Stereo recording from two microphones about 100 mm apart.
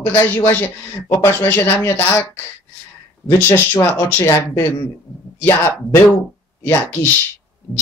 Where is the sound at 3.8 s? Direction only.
25° left (ahead or behind).